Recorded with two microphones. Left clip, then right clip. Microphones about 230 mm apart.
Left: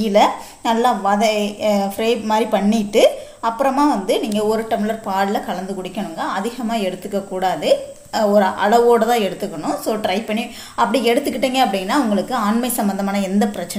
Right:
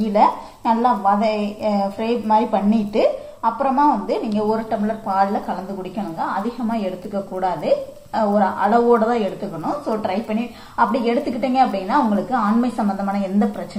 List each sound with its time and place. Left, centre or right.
0.1 s a woman's voice: left
7.3 s a woman's voice: left